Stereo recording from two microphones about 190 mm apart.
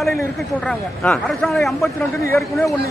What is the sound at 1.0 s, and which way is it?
Speech, centre (ahead or behind).